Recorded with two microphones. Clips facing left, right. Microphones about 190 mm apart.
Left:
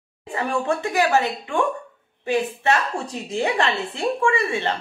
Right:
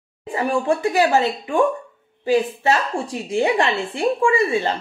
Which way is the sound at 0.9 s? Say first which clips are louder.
Right 1 dB; 15° right (ahead or behind).